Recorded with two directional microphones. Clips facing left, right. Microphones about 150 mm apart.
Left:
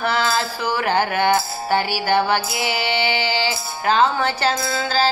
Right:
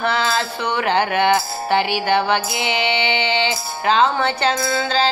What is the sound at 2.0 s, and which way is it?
Music, 5° left (ahead or behind).